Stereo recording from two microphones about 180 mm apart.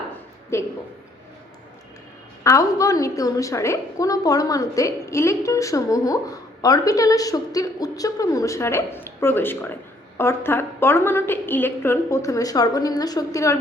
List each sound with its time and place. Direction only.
0.5 s a woman's voice: 15° left (ahead or behind)
2.4 s a woman's voice: 15° left (ahead or behind)